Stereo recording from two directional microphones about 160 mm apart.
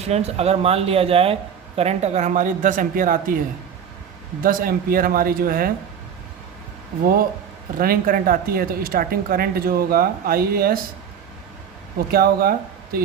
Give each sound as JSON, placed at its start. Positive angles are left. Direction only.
{"t": 0.0, "sound": "speech", "side_deg": -40}
{"t": 4.4, "sound": "speech", "side_deg": -60}
{"t": 7.8, "sound": "speech", "side_deg": -65}
{"t": 12.1, "sound": "speech", "side_deg": -70}